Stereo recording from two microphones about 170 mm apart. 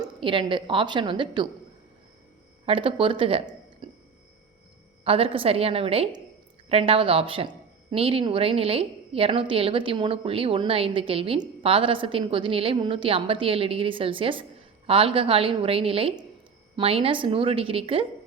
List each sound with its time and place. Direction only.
0.0 s a woman's voice: 30° right (ahead or behind)
2.6 s speech: 30° right (ahead or behind)
3.8 s music: 25° right (ahead or behind)
5.0 s speech: 35° right (ahead or behind)